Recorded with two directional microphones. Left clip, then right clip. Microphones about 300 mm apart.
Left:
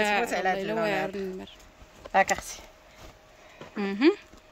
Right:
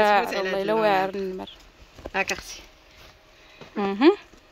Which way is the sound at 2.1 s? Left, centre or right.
Left.